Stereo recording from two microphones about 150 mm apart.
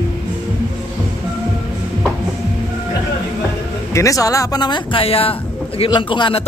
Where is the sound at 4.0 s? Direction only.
20° left (ahead or behind).